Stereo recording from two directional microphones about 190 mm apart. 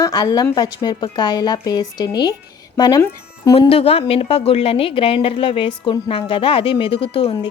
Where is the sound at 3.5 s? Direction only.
30° left (ahead or behind).